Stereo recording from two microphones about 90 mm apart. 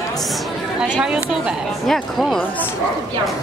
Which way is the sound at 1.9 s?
5° left (ahead or behind).